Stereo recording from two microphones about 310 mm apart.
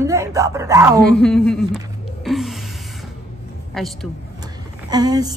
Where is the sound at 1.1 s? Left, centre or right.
Centre.